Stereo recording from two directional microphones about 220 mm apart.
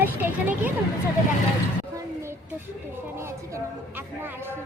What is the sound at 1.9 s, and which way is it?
A woman's voice, 10° right (ahead or behind).